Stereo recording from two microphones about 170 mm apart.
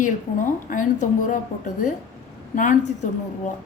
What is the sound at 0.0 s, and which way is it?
A woman's voice, 50° left (ahead or behind).